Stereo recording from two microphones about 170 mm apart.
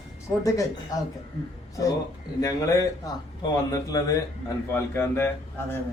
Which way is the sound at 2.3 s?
20° left (ahead or behind).